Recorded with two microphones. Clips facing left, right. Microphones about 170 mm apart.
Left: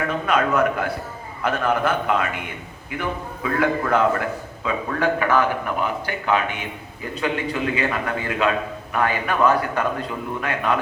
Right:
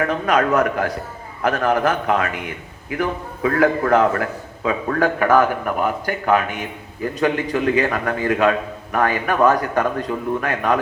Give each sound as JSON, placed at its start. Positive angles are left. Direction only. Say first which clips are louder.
{"t": 0.3, "sound": "a man's voice", "louder": "right 2 dB", "side_deg": -40}